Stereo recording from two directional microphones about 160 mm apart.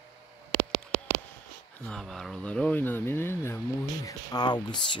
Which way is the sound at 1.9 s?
5° left (ahead or behind).